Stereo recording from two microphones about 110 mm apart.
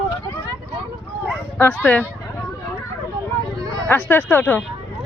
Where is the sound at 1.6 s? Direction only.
15° left (ahead or behind).